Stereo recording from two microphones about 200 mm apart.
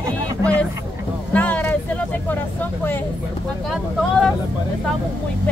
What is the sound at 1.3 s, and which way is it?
Speech, 10° left (ahead or behind).